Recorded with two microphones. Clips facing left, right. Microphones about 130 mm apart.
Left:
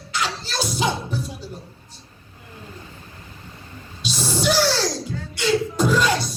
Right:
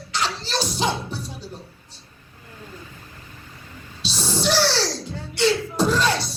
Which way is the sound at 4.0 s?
10° left (ahead or behind).